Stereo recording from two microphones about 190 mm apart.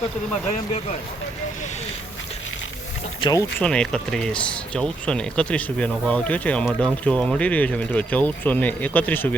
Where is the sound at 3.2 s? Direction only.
20° left (ahead or behind).